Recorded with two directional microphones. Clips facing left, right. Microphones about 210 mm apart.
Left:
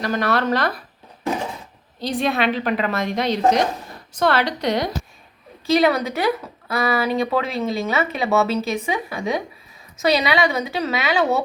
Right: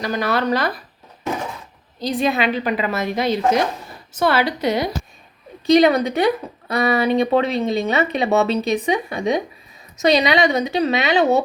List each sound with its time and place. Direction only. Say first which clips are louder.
0.0 s a woman's voice: even; centre (ahead or behind)
2.0 s a woman's voice: right 2 dB; centre (ahead or behind)
5.6 s speech: right 4 dB; 20° right (ahead or behind)